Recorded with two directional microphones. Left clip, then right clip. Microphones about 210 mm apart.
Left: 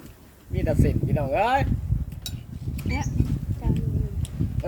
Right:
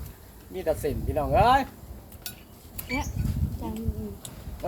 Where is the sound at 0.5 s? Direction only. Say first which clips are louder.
Left 1 dB; 30° left (ahead or behind).